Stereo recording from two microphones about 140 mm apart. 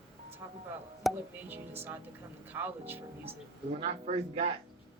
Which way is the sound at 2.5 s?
15° right (ahead or behind).